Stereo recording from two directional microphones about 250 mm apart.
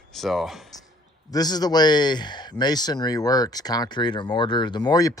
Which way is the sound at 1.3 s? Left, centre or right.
Centre.